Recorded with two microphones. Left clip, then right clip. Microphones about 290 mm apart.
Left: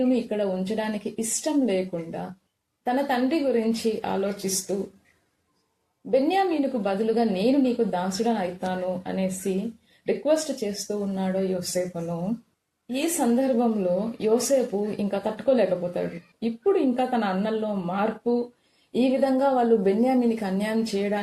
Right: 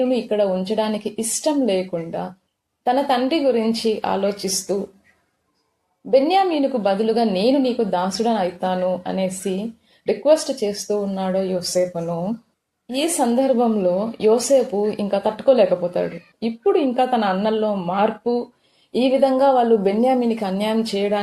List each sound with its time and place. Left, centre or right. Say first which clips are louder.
0.1 s speech: right 6 dB; centre
6.1 s speech: right 6 dB; centre